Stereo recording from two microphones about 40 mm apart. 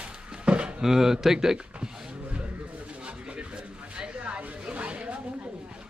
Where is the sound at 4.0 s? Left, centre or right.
Right.